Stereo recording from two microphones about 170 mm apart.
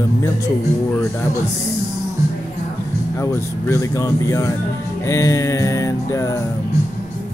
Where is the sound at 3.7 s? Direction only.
20° left (ahead or behind).